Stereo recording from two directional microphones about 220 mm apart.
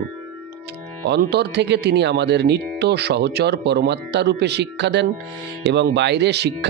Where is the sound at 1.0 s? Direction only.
50° right (ahead or behind).